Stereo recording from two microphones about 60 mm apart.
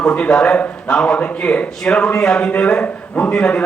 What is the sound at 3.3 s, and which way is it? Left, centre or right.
Speech, centre.